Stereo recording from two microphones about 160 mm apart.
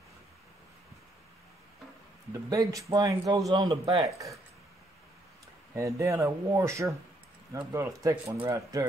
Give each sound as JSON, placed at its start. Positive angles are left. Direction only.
{"t": 2.5, "sound": "speech", "side_deg": -20}
{"t": 4.0, "sound": "speech", "side_deg": -20}
{"t": 5.8, "sound": "speech", "side_deg": -20}